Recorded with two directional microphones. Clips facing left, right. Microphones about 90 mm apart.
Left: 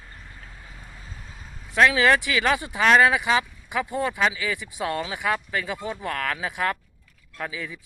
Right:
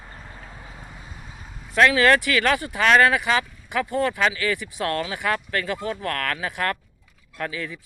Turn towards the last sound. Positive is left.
turn(degrees=10)  # may be behind; listen again after turning